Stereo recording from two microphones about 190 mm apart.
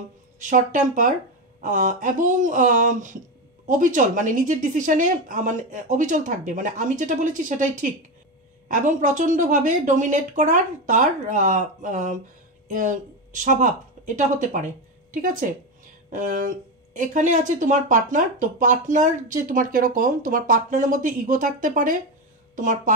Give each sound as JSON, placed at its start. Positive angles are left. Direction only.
{"t": 0.4, "sound": "a woman's voice", "side_deg": -40}